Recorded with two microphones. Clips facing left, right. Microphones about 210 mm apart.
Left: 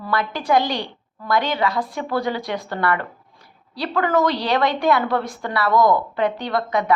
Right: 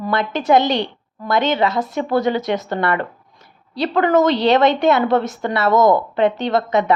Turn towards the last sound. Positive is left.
turn(degrees=-25)  # may be behind; listen again after turning